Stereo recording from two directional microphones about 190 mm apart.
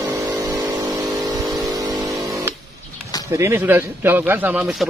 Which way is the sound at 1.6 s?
20° right (ahead or behind).